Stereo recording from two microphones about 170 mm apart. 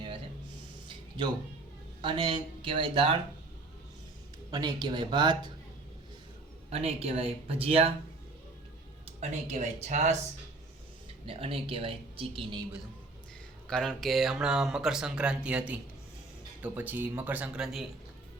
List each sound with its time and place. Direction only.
0.9 s music: 25° right (ahead or behind)
2.0 s speech: 30° right (ahead or behind)
4.5 s speech: 25° right (ahead or behind)
6.7 s speech: 35° right (ahead or behind)
9.2 s speech: 40° right (ahead or behind)
11.3 s speech: 35° right (ahead or behind)
13.7 s speech: centre (ahead or behind)